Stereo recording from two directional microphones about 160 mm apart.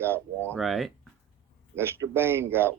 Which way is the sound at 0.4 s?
5° left (ahead or behind).